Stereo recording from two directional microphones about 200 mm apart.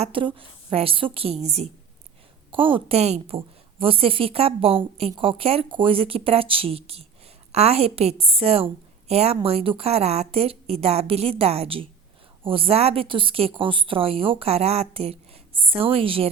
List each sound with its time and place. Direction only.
0.0 s a woman's voice: 25° right (ahead or behind)